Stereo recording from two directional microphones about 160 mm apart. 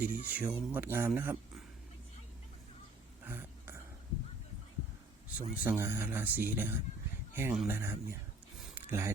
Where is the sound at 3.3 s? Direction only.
15° right (ahead or behind).